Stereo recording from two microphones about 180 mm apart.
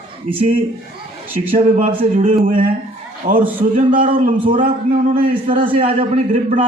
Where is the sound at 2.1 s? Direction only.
50° right (ahead or behind).